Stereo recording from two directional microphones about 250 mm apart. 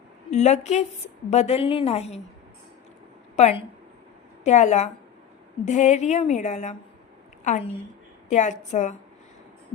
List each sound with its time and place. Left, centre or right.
0.3 s a woman's voice: left
3.3 s a woman's voice: left